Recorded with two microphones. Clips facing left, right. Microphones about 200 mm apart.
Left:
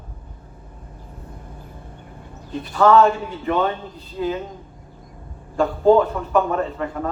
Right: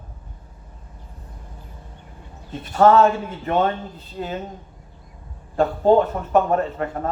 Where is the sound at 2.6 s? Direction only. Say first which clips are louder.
Right 1 dB; 40° right (ahead or behind).